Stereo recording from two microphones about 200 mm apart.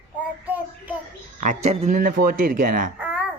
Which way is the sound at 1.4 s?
35° right (ahead or behind).